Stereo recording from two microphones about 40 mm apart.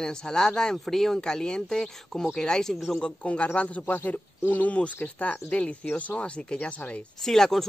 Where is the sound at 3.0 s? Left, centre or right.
Left.